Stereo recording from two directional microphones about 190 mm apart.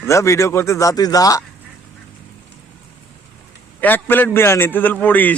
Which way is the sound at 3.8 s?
10° left (ahead or behind).